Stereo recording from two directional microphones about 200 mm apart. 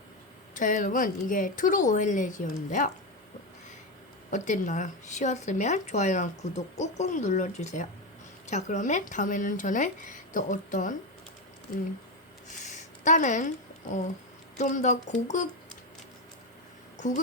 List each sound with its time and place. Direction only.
0.5 s speech: 40° left (ahead or behind)
4.3 s speech: 40° left (ahead or behind)
12.5 s a sound: 35° left (ahead or behind)
14.6 s speech: 35° left (ahead or behind)